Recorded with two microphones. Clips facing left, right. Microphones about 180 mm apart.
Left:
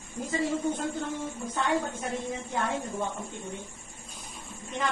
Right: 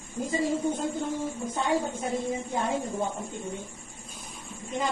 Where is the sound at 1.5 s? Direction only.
15° right (ahead or behind).